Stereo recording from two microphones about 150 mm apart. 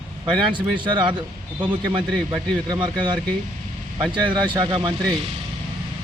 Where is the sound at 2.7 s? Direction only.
30° right (ahead or behind).